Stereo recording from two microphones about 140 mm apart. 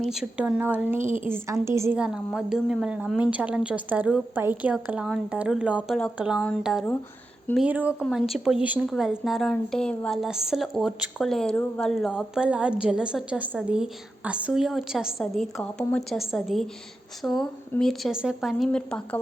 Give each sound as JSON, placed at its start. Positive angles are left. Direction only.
{"t": 0.0, "sound": "a woman's voice", "side_deg": -5}
{"t": 2.0, "sound": "a woman's voice", "side_deg": -5}
{"t": 10.2, "sound": "a woman's voice", "side_deg": -5}